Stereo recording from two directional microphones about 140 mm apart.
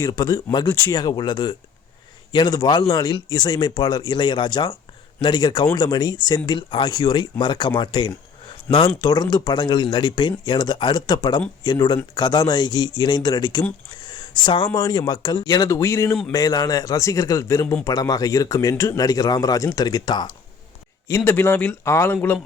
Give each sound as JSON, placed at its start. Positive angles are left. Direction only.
{"t": 0.0, "sound": "a man's voice", "side_deg": 30}
{"t": 14.0, "sound": "a sound", "side_deg": 35}
{"t": 14.8, "sound": "a man's voice", "side_deg": 30}
{"t": 21.2, "sound": "speech", "side_deg": 15}